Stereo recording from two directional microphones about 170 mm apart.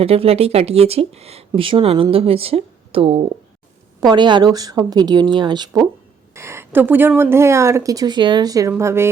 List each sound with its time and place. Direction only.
0.0 s speech: 35° right (ahead or behind); by 9.0 s 15° right (ahead or behind)